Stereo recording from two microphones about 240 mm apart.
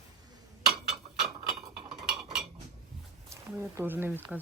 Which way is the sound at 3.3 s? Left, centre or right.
Centre.